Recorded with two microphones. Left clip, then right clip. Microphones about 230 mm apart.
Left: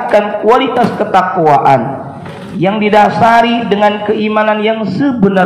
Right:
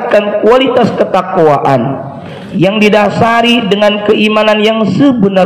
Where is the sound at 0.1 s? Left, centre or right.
Right.